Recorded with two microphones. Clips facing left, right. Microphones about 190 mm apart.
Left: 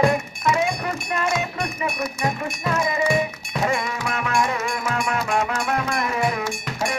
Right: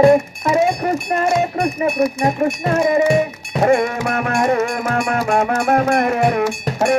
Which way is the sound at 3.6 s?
55° right (ahead or behind).